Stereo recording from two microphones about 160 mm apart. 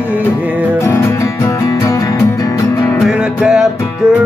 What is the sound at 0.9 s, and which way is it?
Music, 15° left (ahead or behind).